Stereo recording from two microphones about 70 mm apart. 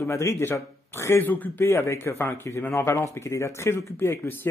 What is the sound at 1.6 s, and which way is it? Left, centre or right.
Speech, left.